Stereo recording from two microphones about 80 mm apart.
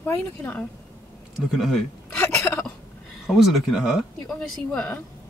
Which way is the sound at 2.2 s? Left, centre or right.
Left.